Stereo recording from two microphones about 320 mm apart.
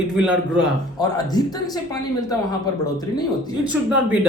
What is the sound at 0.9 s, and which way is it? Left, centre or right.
Speech, centre.